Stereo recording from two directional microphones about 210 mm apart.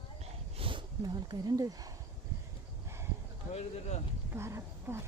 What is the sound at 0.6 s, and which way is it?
Speech, 20° right (ahead or behind).